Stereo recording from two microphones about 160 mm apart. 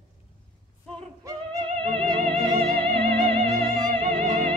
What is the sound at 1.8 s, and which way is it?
Music, 45° right (ahead or behind).